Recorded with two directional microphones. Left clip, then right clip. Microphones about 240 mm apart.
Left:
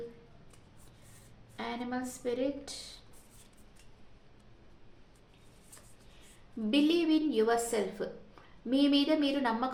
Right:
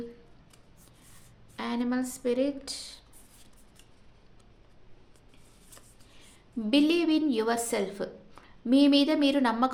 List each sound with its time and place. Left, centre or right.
1.5 s a woman's voice: right
6.7 s a woman's voice: right